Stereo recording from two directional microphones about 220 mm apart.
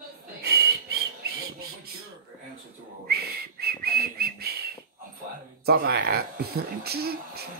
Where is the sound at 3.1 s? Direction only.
45° right (ahead or behind).